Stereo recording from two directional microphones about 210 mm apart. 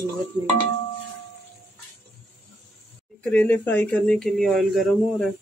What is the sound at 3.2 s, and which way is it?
Speech, 5° left (ahead or behind).